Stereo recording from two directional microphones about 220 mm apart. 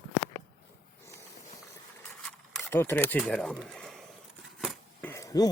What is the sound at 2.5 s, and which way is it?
Speech, 5° left (ahead or behind).